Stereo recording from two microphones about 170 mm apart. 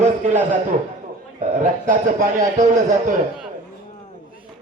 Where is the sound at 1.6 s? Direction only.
50° right (ahead or behind).